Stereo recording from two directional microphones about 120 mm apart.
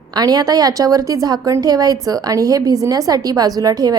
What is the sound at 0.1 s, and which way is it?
A woman's voice, 35° right (ahead or behind).